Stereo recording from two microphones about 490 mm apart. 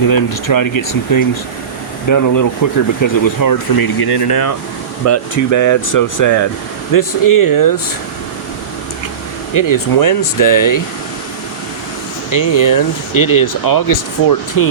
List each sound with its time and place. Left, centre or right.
0.5 s speech: left
5.0 s speech: left
9.6 s speech: left
12.3 s speech: left